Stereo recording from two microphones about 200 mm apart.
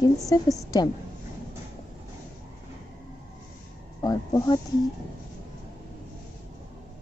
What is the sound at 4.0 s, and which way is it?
Speech, 20° left (ahead or behind).